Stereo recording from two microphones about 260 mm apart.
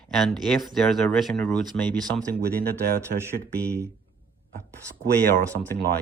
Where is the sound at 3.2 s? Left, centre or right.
Centre.